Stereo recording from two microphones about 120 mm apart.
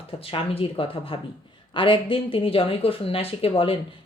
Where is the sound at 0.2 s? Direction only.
50° left (ahead or behind).